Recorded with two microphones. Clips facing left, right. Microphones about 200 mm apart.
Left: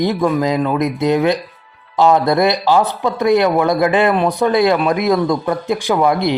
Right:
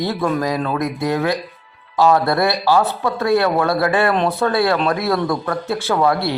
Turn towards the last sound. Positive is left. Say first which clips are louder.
# left 3 dB
turn(degrees=20)  # may be behind; listen again after turning